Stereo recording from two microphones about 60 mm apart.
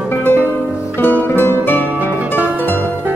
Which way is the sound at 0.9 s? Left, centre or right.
Left.